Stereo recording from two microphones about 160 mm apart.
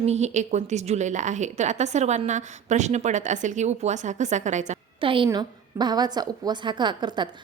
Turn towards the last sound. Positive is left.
turn(degrees=-30)  # may be behind; listen again after turning